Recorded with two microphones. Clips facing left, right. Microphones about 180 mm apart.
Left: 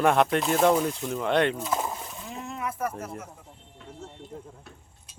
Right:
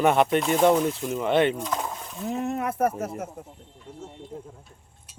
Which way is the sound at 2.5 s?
50° right (ahead or behind).